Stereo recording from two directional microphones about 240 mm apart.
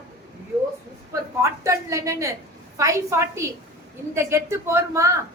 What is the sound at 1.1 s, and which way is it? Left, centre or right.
A woman's voice, centre.